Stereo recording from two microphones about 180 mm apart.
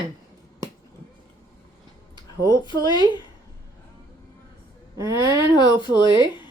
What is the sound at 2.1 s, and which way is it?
Speech, 20° left (ahead or behind).